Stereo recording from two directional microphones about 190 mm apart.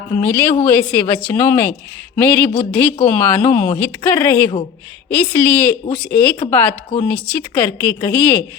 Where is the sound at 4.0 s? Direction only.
20° left (ahead or behind).